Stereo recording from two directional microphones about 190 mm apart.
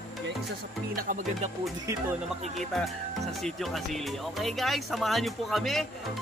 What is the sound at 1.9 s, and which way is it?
Speech, 15° right (ahead or behind).